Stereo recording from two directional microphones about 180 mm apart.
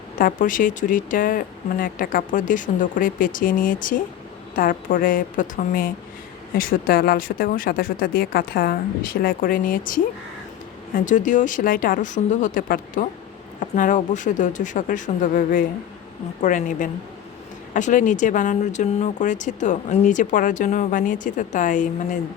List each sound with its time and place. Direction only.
0.2 s speech: 50° left (ahead or behind)